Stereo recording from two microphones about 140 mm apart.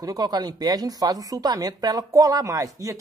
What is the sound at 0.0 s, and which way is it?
Speech, 25° right (ahead or behind).